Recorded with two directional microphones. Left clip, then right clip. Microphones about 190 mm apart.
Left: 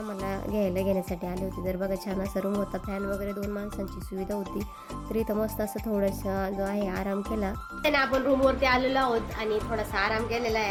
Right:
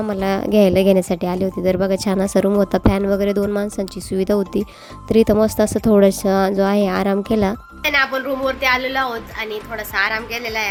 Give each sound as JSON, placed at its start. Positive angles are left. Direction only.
{"t": 0.1, "sound": "a woman's voice", "side_deg": -45}
{"t": 7.8, "sound": "a woman's voice", "side_deg": 5}